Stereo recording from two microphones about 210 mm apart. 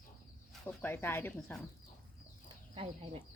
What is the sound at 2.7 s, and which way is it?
Speech, 30° right (ahead or behind).